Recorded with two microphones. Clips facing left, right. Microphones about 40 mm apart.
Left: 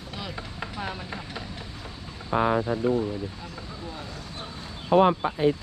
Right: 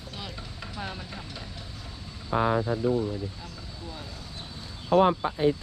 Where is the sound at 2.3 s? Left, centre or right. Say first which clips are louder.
Left 2 dB; left.